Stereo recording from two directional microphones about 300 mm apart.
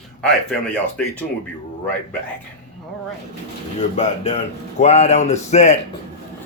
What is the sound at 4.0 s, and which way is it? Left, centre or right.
Speech, left.